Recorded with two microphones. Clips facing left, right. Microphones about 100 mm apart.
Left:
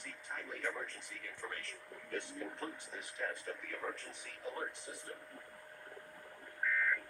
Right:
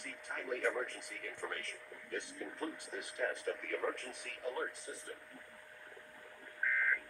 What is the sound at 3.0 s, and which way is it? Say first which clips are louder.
Speech: right 3 dB; 90° right.